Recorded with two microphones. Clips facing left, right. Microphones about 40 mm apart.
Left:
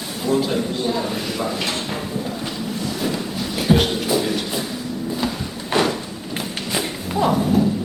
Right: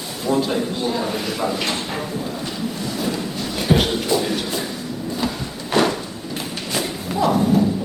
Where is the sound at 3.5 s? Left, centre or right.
Centre.